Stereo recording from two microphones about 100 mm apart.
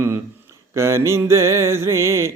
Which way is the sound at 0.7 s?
30° right (ahead or behind).